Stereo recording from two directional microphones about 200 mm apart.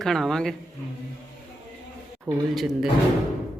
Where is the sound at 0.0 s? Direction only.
Centre (ahead or behind).